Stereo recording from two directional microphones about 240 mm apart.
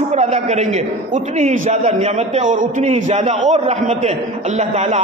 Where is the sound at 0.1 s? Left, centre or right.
Right.